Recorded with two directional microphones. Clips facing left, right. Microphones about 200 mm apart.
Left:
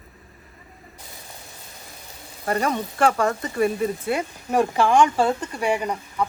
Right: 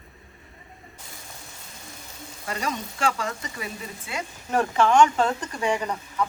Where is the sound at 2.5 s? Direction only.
55° left (ahead or behind).